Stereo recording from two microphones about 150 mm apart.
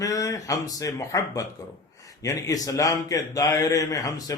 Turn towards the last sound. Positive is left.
turn(degrees=25)  # may be behind; listen again after turning